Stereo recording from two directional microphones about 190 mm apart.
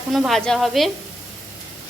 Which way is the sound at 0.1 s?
Centre (ahead or behind).